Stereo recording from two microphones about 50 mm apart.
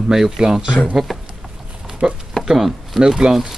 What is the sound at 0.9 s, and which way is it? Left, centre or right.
Speech, centre.